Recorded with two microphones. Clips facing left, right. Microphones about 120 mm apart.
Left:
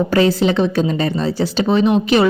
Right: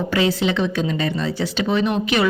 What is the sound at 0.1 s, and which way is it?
A woman's voice, 40° left (ahead or behind).